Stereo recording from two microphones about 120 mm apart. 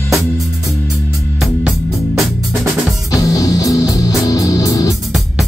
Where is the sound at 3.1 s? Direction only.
30° left (ahead or behind).